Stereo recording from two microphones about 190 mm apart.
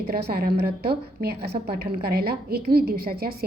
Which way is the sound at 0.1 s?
55° right (ahead or behind).